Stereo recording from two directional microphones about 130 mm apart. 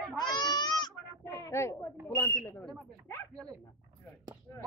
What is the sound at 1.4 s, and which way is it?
Speech, 25° left (ahead or behind).